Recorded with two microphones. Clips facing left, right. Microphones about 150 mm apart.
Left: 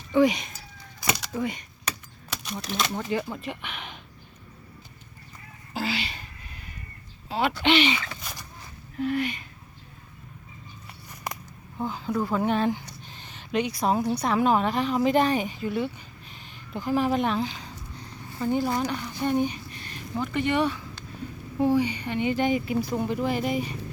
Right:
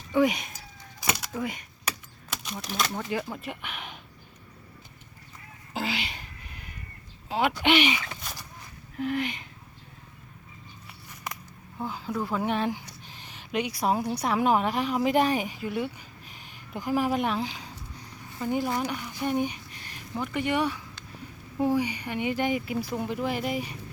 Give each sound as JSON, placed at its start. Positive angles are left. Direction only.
{"t": 0.1, "sound": "speech", "side_deg": -5}
{"t": 1.1, "sound": "a sound", "side_deg": 0}
{"t": 2.3, "sound": "speech", "side_deg": -5}
{"t": 5.7, "sound": "cat", "side_deg": -15}
{"t": 7.3, "sound": "speech", "side_deg": -15}
{"t": 8.2, "sound": "a sound", "side_deg": 0}
{"t": 9.0, "sound": "speech", "side_deg": -15}
{"t": 11.8, "sound": "speech", "side_deg": -5}
{"t": 18.6, "sound": "speech", "side_deg": 35}
{"t": 18.9, "sound": "speech", "side_deg": -10}